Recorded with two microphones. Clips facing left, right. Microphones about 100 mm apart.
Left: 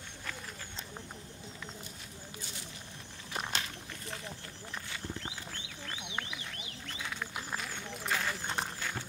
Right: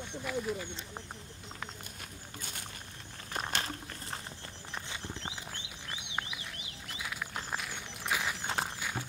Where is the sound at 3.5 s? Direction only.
45° right (ahead or behind).